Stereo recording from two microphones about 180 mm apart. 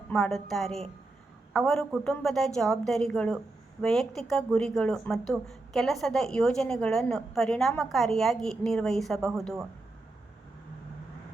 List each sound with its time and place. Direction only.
0.1 s speech: centre (ahead or behind)